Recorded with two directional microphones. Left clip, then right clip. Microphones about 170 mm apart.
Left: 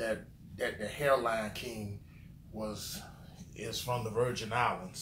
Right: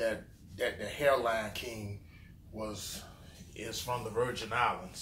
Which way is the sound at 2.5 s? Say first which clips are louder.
Even; 25° right (ahead or behind).